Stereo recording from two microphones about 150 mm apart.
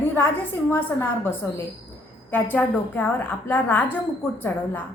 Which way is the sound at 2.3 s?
10° left (ahead or behind).